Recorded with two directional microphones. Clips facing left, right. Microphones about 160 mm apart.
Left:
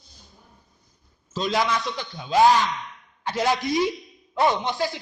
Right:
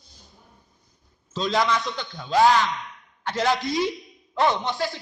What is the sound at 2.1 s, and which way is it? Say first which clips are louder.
Speech: left 1 dB; 20° left (ahead or behind).